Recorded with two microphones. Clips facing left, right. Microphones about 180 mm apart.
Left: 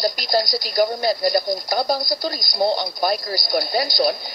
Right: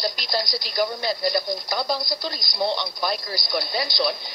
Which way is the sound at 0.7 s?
40° left (ahead or behind).